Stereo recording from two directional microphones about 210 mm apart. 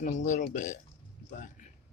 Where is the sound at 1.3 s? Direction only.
35° left (ahead or behind).